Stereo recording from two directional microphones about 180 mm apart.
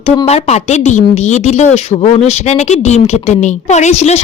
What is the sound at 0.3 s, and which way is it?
A woman's voice, 35° left (ahead or behind).